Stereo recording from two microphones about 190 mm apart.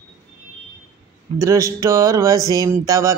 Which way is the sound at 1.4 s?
15° right (ahead or behind).